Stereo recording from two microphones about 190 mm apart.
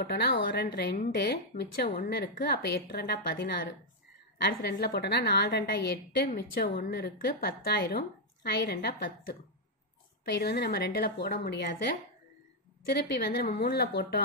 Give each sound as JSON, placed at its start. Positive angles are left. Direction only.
{"t": 0.0, "sound": "a woman's voice", "side_deg": 55}
{"t": 12.9, "sound": "a woman's voice", "side_deg": 60}